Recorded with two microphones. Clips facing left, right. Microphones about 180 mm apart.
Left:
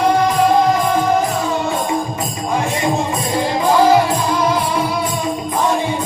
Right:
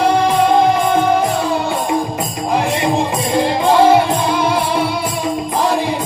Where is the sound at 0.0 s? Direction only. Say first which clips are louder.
Right 1 dB; 30° right (ahead or behind).